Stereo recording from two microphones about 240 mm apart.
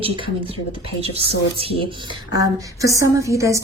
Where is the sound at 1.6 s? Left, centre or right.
Right.